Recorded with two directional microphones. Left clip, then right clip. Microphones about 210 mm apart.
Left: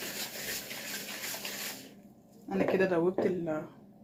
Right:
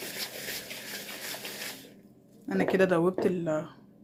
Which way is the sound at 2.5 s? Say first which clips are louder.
Right 3 dB; 45° right (ahead or behind).